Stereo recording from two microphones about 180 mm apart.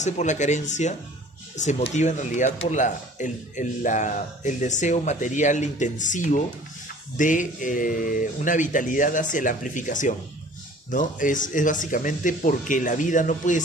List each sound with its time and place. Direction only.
0.0 s speech: 40° left (ahead or behind)